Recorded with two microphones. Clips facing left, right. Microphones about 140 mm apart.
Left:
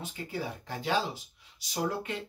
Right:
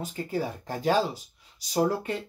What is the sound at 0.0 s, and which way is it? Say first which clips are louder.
Speech: right 6 dB; 45° right (ahead or behind).